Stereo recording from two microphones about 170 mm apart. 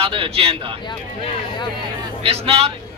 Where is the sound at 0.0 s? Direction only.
35° right (ahead or behind).